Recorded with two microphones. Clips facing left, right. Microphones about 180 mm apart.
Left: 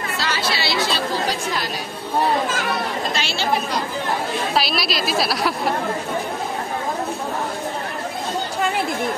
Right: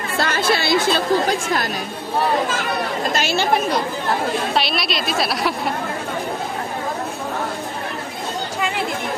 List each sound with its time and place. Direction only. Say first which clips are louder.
0.2 s speech: right 6 dB; 50° right (ahead or behind)
3.1 s speech: right 5 dB; 45° right (ahead or behind)
4.6 s a woman's voice: even; centre (ahead or behind)